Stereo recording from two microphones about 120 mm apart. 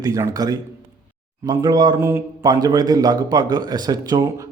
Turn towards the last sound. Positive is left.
turn(degrees=-35)  # may be behind; listen again after turning